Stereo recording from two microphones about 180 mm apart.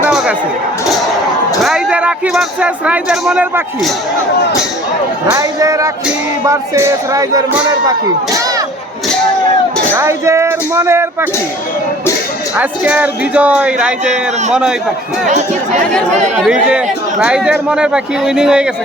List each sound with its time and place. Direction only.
0.1 s a sound: 5° right (ahead or behind)
1.6 s speech: 5° right (ahead or behind)
5.3 s music: 20° right (ahead or behind)
9.9 s speech: 15° right (ahead or behind)
12.5 s speech: 10° right (ahead or behind)
14.0 s a man's voice: 40° right (ahead or behind)
14.5 s speech: 5° right (ahead or behind)
15.3 s a man's voice: 40° right (ahead or behind)
16.4 s speech: 5° right (ahead or behind)